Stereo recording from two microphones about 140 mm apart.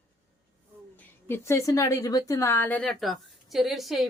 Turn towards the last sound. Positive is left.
turn(degrees=0)  # may be behind; listen again after turning